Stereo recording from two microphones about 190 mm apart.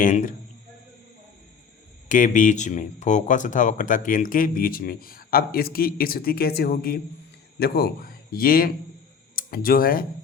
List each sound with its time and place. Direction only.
0.0 s speech: 45° left (ahead or behind)
2.0 s speech: 40° left (ahead or behind)